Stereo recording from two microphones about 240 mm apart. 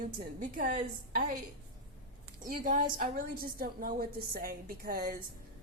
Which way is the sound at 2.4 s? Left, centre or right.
Right.